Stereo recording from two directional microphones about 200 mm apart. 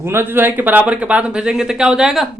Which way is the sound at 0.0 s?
10° right (ahead or behind).